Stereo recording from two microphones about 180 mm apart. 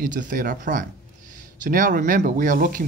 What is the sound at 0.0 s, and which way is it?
Speech, 45° right (ahead or behind).